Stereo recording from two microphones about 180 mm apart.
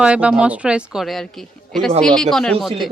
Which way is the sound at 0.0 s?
5° right (ahead or behind).